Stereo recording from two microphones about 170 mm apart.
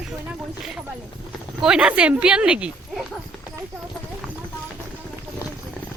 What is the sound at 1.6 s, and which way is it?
Speech, 5° right (ahead or behind).